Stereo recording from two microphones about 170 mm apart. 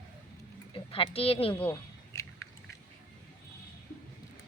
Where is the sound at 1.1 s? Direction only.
35° left (ahead or behind).